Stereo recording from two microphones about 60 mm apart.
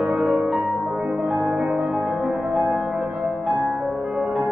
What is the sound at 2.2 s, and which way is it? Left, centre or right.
Music, centre.